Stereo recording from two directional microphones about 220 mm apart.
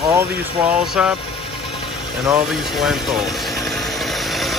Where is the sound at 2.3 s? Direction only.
Centre (ahead or behind).